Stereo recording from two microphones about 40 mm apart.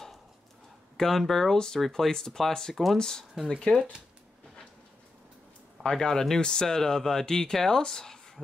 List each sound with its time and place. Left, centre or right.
0.9 s speech: centre
3.7 s speech: left
5.9 s speech: centre